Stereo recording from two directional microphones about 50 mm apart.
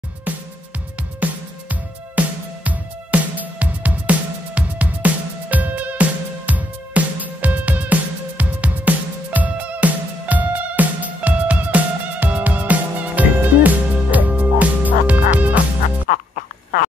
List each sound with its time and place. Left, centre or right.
1.2 s music: right